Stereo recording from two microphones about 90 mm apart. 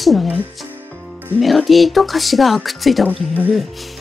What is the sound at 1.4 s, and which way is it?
Speech, centre (ahead or behind).